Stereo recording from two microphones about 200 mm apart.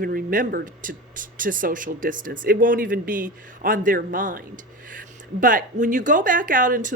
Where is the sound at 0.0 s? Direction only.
45° right (ahead or behind).